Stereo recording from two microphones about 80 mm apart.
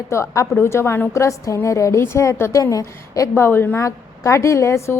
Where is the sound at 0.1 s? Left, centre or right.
Left.